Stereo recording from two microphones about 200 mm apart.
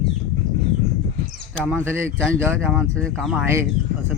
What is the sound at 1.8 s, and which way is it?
Speech, 10° right (ahead or behind).